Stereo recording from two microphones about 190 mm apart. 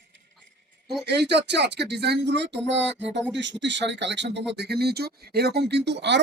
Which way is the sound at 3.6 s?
70° right (ahead or behind).